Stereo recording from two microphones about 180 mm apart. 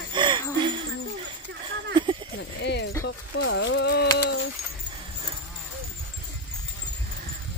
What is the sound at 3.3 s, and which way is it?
Speech, 90° left.